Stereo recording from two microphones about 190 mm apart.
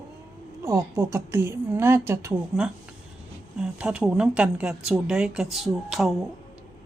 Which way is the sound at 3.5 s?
5° right (ahead or behind).